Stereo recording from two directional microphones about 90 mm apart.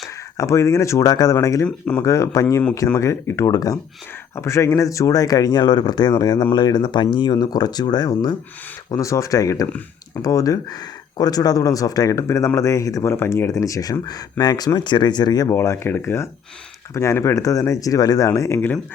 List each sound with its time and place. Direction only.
0.3 s speech: 35° left (ahead or behind); by 8.4 s 50° left (ahead or behind)
8.9 s speech: 35° left (ahead or behind)
15.5 s speech: 30° left (ahead or behind)